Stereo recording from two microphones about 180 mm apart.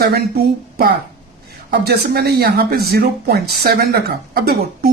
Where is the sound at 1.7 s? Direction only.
60° right (ahead or behind).